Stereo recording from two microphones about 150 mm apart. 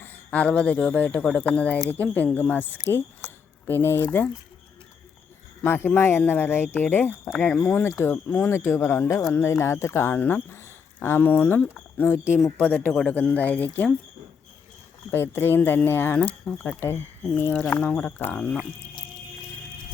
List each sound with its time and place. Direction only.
0.0 s speech: 10° left (ahead or behind)
5.6 s speech: 15° left (ahead or behind)
15.1 s speech: 15° left (ahead or behind)